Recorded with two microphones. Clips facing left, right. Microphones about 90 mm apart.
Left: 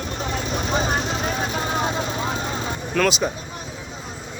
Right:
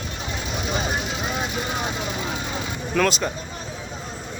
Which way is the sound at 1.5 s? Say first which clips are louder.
Left 3 dB; 30° left (ahead or behind).